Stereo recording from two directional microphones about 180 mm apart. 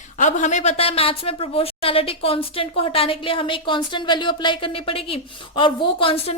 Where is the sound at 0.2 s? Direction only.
40° left (ahead or behind).